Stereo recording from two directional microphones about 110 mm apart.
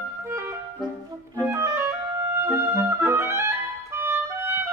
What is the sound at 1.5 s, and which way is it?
Clarinet, 25° right (ahead or behind).